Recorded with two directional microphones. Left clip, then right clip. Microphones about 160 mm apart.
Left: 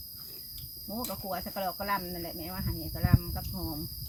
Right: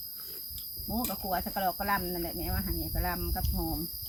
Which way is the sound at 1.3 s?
25° left (ahead or behind).